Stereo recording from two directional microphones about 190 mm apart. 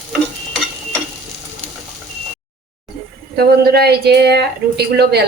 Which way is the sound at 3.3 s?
55° right (ahead or behind).